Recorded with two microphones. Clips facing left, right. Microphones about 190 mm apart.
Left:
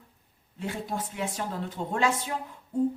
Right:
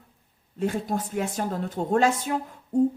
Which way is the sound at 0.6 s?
45° right (ahead or behind).